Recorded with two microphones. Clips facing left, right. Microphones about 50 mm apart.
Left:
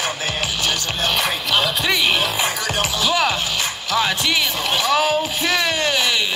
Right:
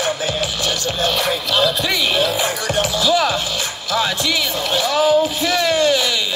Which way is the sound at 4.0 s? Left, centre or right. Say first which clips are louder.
Even; left.